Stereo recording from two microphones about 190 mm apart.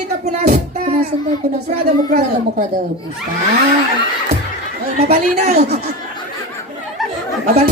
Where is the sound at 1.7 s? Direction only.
45° right (ahead or behind).